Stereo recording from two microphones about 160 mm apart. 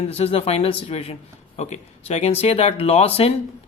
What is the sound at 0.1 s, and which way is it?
Speech, 40° left (ahead or behind).